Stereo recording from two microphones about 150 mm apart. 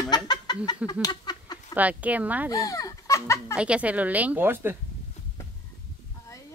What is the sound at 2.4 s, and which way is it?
Speech, 25° left (ahead or behind).